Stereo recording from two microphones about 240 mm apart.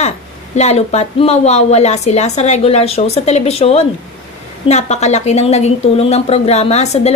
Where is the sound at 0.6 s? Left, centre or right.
Left.